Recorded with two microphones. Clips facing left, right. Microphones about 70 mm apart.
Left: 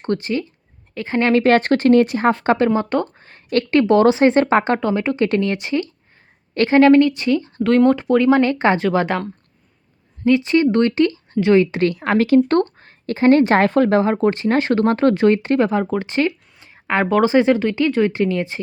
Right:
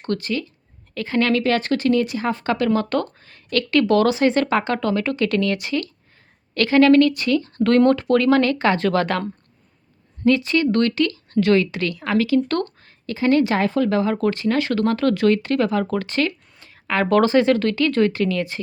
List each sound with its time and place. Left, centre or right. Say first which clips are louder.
0.0 s speech: left 3 dB; left
2.6 s speech: left 2 dB; left
3.2 s speech: left 3 dB; left; by 9.2 s centre
10.2 s speech: left 3 dB; centre